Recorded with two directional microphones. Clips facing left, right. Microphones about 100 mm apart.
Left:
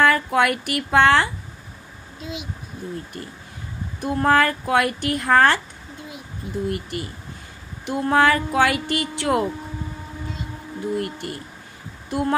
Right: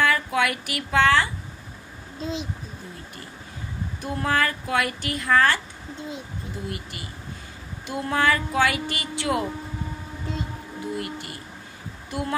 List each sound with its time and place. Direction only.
0.0 s speech: 50° left (ahead or behind)
2.1 s a child's voice: 30° right (ahead or behind)
4.0 s speech: 45° left (ahead or behind)
6.7 s speech: 50° left (ahead or behind)
11.0 s speech: 45° left (ahead or behind)